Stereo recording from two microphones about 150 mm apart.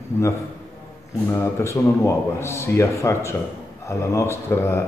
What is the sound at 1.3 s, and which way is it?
A man's voice, 20° left (ahead or behind).